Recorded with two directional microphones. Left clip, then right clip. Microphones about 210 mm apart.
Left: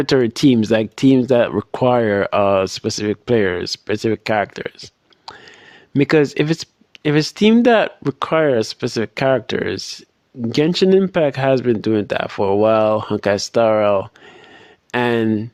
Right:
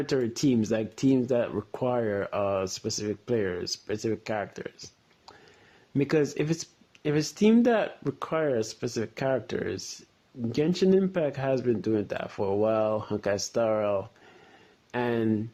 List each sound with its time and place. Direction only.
0.0 s speech: 40° left (ahead or behind)